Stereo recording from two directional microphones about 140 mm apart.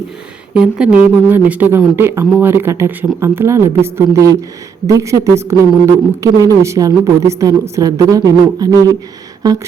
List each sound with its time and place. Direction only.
0.5 s a woman's voice: 5° right (ahead or behind); by 9.6 s 25° right (ahead or behind)